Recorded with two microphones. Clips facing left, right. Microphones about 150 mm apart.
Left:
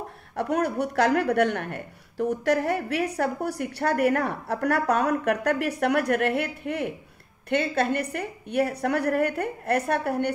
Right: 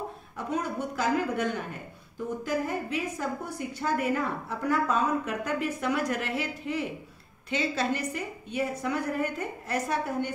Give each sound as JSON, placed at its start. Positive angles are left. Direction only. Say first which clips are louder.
{"t": 0.4, "sound": "a woman's voice", "louder": "left 6 dB", "side_deg": 70}